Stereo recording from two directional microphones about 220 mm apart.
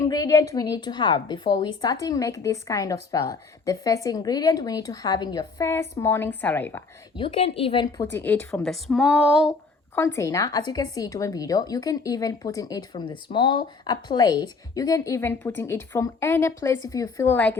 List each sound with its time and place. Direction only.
0.0 s a woman's voice: 15° left (ahead or behind)
7.2 s a woman's voice: 25° left (ahead or behind)
8.1 s speech: 10° left (ahead or behind)
9.5 s a woman's voice: 10° left (ahead or behind)